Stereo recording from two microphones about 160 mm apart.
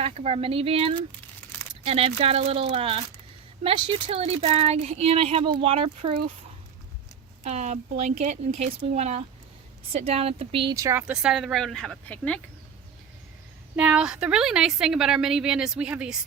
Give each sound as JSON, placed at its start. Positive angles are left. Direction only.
{"t": 0.0, "sound": "speech", "side_deg": -40}
{"t": 7.4, "sound": "speech", "side_deg": -45}
{"t": 10.8, "sound": "speech", "side_deg": -20}
{"t": 11.0, "sound": "a woman's voice", "side_deg": -5}
{"t": 13.7, "sound": "a woman's voice", "side_deg": -5}